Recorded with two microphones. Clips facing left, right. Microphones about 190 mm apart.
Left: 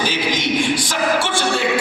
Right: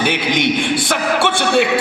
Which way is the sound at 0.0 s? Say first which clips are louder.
Right 4 dB; 60° right (ahead or behind).